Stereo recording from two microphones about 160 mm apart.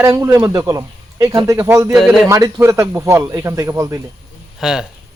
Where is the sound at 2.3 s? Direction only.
15° right (ahead or behind).